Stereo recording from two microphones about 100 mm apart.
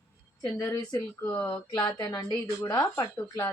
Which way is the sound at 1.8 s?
45° left (ahead or behind).